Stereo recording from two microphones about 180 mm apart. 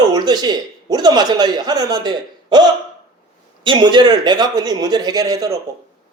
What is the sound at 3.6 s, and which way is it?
A woman's voice, 25° right (ahead or behind).